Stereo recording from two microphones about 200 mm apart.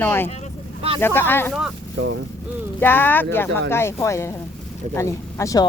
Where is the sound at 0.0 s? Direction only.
10° left (ahead or behind).